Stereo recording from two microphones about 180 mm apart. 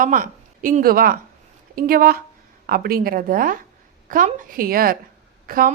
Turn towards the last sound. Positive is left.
turn(degrees=-55)  # may be behind; listen again after turning